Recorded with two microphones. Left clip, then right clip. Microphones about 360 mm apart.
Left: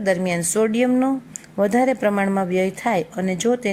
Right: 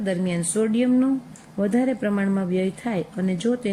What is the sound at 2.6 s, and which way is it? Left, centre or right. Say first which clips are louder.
Speech: left 6 dB; left.